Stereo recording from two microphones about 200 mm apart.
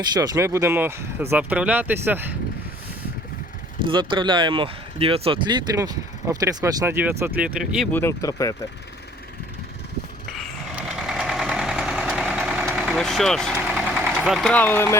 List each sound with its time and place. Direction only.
0.0 s speech: 20° right (ahead or behind)
3.8 s speech: 25° right (ahead or behind); by 7.9 s 5° right (ahead or behind)
7.9 s speech: 15° left (ahead or behind)
10.2 s a sound: centre (ahead or behind)